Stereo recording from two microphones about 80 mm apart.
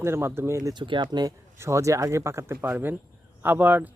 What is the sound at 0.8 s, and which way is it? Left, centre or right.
Speech, right.